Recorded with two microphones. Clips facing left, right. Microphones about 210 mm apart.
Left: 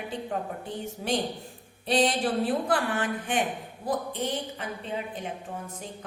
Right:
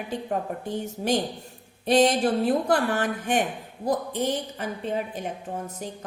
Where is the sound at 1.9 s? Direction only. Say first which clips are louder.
Right 5 dB; 45° right (ahead or behind).